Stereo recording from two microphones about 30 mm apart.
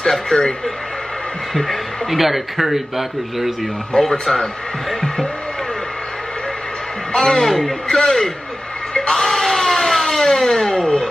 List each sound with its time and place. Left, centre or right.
0.0 s a man's voice: centre
1.5 s a woman's voice: centre
4.0 s a man's voice: centre
7.2 s a man's voice: centre
8.9 s a sound: left